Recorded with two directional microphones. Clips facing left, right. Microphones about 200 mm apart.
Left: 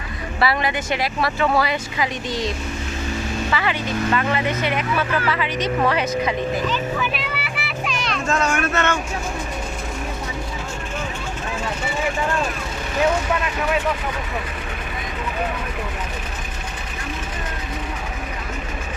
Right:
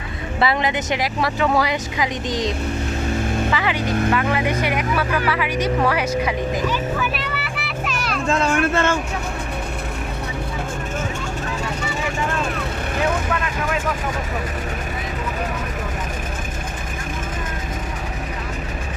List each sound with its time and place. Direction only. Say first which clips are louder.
0.3 s speech: right 1 dB; 20° right (ahead or behind)
3.5 s speech: right 2 dB; 15° right (ahead or behind)
7.0 s children playing: right 1 dB; centre (ahead or behind)
8.3 s speech: right 3 dB; 30° right (ahead or behind)